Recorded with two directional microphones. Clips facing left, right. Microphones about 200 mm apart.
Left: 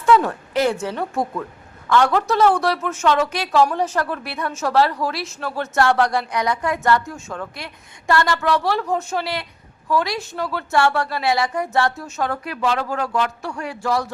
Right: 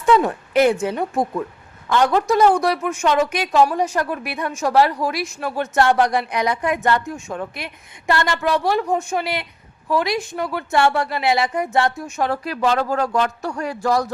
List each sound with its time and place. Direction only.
0.0 s a woman's voice: 20° right (ahead or behind)
12.3 s a man's voice: 35° right (ahead or behind)